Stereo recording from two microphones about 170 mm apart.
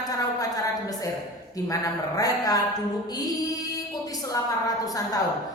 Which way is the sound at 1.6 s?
20° left (ahead or behind).